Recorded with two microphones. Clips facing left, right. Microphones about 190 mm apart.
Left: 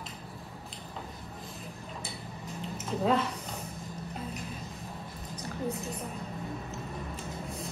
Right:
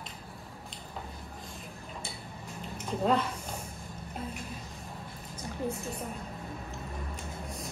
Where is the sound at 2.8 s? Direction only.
Centre (ahead or behind).